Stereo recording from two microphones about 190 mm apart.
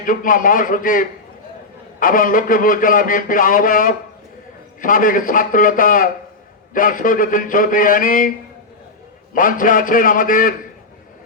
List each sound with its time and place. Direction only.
0.0 s a man's voice: 45° left (ahead or behind)
9.3 s a man's voice: 45° left (ahead or behind)